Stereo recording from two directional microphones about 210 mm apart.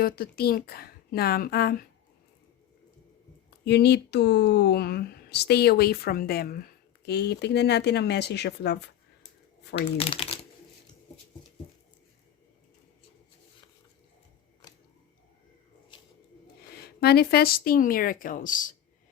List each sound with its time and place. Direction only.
0.0 s speech: 45° left (ahead or behind)
3.7 s speech: 50° left (ahead or behind)
9.7 s speech: 25° left (ahead or behind)
15.9 s a sound: 20° left (ahead or behind)
16.7 s speech: 50° left (ahead or behind)